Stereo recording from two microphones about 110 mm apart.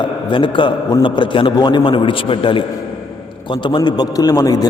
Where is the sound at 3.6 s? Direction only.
45° left (ahead or behind).